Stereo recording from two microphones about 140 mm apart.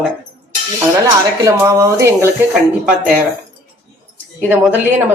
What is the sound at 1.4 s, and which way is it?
Speech, 20° right (ahead or behind).